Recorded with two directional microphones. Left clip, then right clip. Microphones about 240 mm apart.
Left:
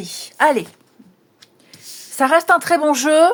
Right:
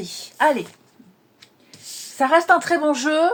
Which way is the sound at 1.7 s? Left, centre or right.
Left.